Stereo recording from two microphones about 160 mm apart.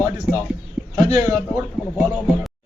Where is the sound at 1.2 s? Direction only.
10° right (ahead or behind).